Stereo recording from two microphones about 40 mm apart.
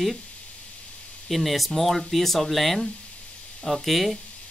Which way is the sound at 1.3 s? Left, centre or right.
Centre.